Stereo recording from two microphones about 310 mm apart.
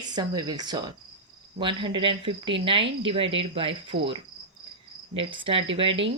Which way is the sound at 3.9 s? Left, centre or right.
Right.